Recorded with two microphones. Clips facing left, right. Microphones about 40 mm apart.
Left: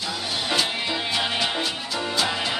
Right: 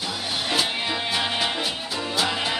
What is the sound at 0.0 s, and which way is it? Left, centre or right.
Music, centre.